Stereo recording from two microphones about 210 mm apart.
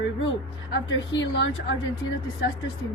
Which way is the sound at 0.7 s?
65° left (ahead or behind).